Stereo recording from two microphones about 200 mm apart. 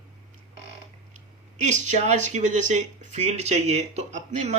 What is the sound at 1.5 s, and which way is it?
Speech, 35° right (ahead or behind).